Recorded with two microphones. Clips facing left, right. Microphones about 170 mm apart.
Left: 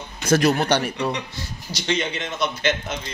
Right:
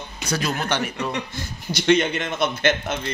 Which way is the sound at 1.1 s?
55° right (ahead or behind).